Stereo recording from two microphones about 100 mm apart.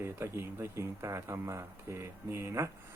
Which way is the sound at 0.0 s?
25° right (ahead or behind).